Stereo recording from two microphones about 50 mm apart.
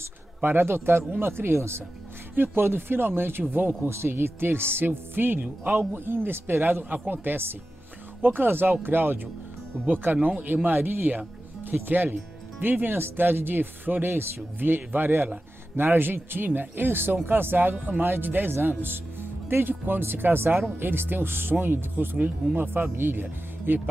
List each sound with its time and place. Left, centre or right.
0.4 s speech: right
3.9 s speech: right
5.4 s speech: right